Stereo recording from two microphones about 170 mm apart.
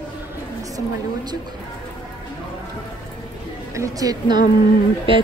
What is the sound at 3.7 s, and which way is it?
Speech, 20° right (ahead or behind).